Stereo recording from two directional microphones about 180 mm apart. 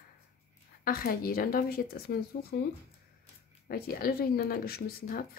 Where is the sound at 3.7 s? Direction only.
55° left (ahead or behind).